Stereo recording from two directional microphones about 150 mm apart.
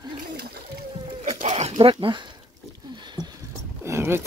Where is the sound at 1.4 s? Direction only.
50° right (ahead or behind).